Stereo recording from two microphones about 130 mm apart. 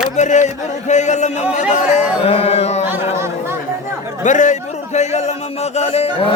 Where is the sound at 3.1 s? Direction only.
20° right (ahead or behind).